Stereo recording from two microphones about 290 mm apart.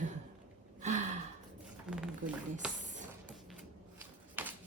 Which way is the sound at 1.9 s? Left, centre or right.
Centre.